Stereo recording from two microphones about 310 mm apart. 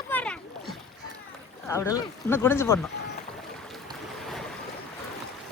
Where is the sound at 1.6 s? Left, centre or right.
Centre.